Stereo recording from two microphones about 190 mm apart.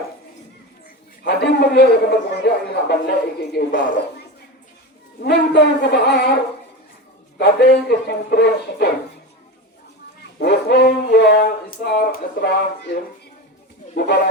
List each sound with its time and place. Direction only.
1.2 s a man's voice: 60° left (ahead or behind)
5.2 s a man's voice: 60° left (ahead or behind)
7.3 s a man's voice: 60° left (ahead or behind)
10.3 s a man's voice: 60° left (ahead or behind)